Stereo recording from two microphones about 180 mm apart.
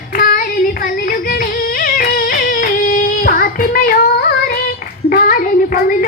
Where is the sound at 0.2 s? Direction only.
55° left (ahead or behind).